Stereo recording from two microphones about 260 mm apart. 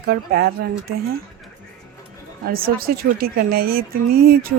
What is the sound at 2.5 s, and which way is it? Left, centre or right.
Speech, right.